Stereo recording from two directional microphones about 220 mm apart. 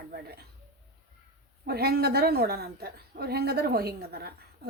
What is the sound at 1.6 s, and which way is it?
A woman's voice, 45° right (ahead or behind).